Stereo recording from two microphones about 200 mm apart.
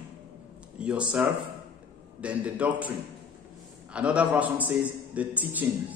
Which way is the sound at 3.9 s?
5° right (ahead or behind).